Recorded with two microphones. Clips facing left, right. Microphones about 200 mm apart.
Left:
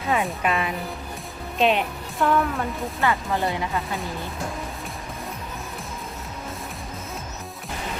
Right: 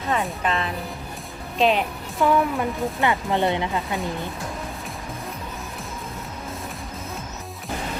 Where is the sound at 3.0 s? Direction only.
20° right (ahead or behind).